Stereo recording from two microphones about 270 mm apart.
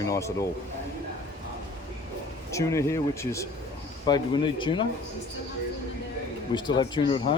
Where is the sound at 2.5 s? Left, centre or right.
Centre.